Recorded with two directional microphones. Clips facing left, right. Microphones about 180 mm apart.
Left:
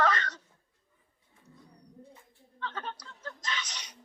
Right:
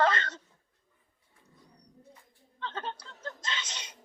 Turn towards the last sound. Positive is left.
turn(degrees=-25)  # may be behind; listen again after turning